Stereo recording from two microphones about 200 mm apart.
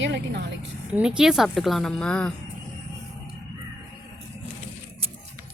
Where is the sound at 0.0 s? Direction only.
60° right (ahead or behind).